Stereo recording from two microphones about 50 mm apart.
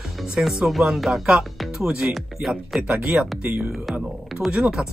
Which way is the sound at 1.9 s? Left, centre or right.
Centre.